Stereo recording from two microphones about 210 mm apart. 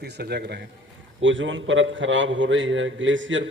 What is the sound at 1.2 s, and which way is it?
A man's voice, 65° right (ahead or behind).